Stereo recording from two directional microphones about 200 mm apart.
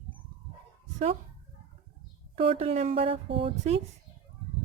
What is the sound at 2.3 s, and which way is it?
Speech, 30° right (ahead or behind).